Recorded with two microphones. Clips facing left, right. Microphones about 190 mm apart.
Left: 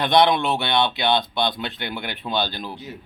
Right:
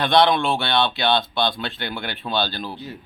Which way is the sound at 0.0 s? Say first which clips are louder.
Even; 20° left (ahead or behind).